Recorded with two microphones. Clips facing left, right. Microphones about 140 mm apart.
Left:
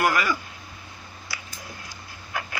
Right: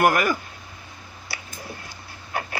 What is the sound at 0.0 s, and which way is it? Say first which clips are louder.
Speech: right 4 dB; 50° right (ahead or behind).